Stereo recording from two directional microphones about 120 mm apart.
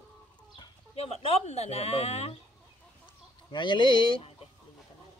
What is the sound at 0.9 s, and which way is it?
Speech, 60° left (ahead or behind).